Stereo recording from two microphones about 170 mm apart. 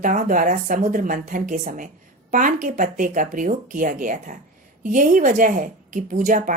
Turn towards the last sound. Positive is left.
turn(degrees=-50)  # may be behind; listen again after turning